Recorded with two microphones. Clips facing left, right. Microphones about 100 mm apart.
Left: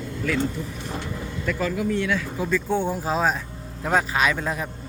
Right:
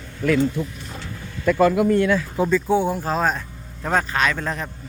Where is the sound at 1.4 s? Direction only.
50° right (ahead or behind).